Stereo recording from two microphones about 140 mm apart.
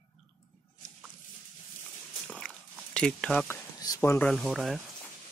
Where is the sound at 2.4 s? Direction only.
5° left (ahead or behind).